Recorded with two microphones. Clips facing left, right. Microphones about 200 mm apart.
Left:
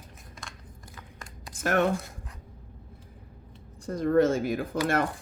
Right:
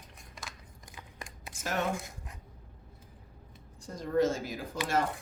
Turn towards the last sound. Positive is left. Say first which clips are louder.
# left 5 dB
turn(degrees=60)  # may be behind; listen again after turning